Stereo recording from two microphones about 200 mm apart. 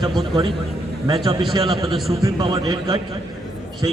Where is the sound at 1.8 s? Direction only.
Centre (ahead or behind).